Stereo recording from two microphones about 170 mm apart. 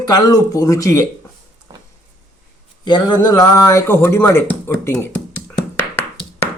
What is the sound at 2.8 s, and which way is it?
Speech, 25° left (ahead or behind).